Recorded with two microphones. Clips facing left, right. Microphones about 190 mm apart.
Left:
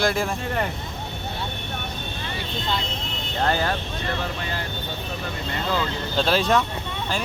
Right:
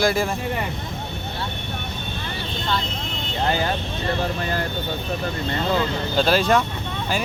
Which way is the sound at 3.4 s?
15° right (ahead or behind).